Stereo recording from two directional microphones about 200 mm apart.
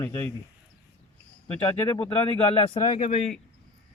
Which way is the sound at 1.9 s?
25° left (ahead or behind).